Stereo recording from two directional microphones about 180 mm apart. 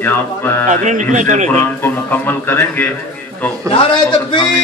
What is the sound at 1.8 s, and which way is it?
A man's voice, 10° left (ahead or behind).